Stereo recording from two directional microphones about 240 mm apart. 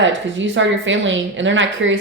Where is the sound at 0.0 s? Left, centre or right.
Right.